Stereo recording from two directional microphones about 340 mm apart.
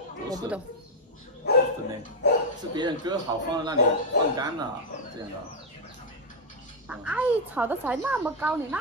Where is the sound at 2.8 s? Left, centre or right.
Centre.